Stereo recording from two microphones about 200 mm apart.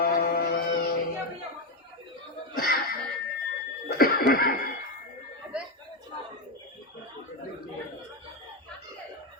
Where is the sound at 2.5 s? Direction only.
50° left (ahead or behind).